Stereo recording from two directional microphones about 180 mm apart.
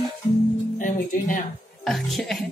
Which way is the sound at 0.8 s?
45° left (ahead or behind).